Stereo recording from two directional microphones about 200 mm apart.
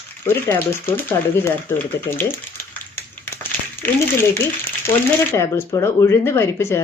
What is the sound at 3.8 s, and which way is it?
Speech, 15° left (ahead or behind).